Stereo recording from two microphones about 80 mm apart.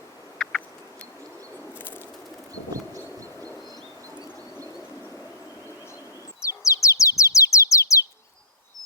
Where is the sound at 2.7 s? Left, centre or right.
Right.